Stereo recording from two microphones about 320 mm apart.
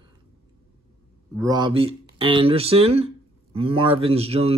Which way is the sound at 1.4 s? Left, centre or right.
Centre.